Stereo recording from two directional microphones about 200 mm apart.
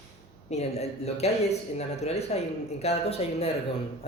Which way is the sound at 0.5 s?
35° left (ahead or behind).